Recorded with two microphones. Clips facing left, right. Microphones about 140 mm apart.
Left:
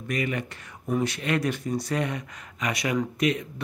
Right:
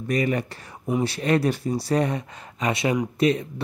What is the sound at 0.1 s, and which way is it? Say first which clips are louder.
Speech: right 5 dB; 35° right (ahead or behind).